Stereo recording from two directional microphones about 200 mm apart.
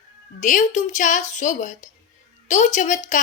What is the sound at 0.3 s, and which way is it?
Speech, 40° left (ahead or behind).